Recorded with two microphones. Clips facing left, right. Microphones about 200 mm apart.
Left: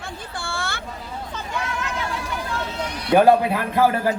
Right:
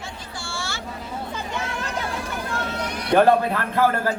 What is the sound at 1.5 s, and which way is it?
Hubbub, 30° right (ahead or behind).